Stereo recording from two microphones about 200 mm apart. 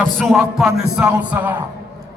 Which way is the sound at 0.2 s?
Centre (ahead or behind).